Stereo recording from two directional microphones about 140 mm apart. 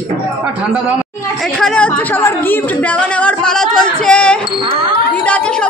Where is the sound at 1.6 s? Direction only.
5° left (ahead or behind).